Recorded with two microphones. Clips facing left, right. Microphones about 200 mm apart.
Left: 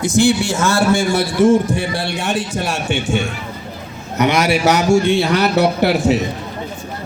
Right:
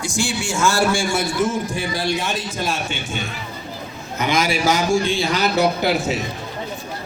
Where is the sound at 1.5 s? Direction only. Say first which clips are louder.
Left 9 dB; 65° left (ahead or behind).